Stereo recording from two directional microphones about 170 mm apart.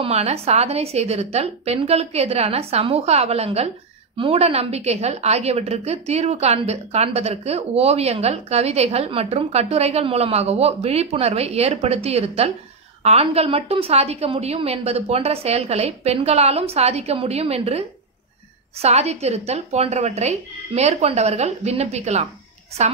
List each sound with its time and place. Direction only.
0.0 s a woman's voice: 40° right (ahead or behind)